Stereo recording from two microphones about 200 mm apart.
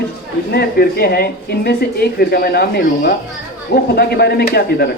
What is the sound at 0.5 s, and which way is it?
A woman's voice, 50° left (ahead or behind).